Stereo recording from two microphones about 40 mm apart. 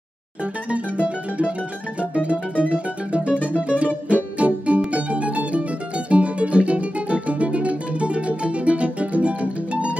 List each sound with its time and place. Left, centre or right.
2.0 s music: right